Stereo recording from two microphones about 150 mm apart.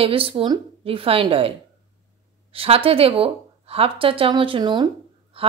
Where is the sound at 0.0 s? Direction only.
40° right (ahead or behind).